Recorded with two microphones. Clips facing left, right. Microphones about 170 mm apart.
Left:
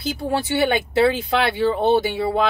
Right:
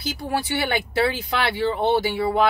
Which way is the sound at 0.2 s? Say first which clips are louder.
Left 5 dB; 25° left (ahead or behind).